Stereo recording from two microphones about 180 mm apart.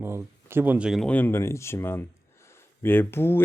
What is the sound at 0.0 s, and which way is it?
Speech, 15° right (ahead or behind).